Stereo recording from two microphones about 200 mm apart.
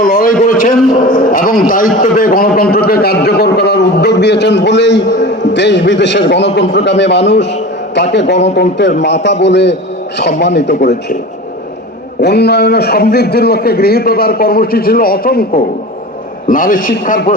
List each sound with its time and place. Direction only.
0.0 s a sound: 45° left (ahead or behind)
2.0 s a man's voice: 45° left (ahead or behind)
12.2 s a man's voice: 55° left (ahead or behind)